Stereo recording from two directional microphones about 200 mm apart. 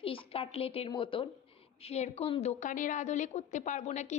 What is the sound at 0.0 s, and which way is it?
A woman's voice, 30° left (ahead or behind).